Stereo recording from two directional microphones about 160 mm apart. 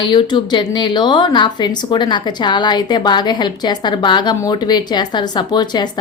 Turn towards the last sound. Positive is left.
turn(degrees=25)  # may be behind; listen again after turning